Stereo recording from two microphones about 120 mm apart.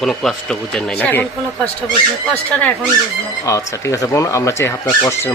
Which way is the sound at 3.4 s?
25° left (ahead or behind).